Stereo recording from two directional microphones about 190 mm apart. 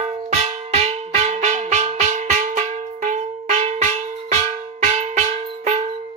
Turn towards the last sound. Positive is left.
turn(degrees=-35)  # may be behind; listen again after turning